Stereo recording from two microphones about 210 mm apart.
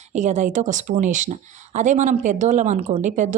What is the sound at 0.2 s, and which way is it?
A woman's voice, 35° right (ahead or behind).